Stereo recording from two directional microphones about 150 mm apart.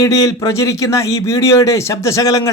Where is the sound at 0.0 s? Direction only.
25° left (ahead or behind).